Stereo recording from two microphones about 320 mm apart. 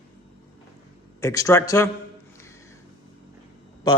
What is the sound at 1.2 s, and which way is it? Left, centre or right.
Speech, centre.